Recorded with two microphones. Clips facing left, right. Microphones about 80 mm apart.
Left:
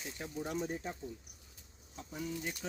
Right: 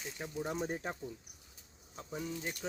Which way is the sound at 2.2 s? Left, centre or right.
Centre.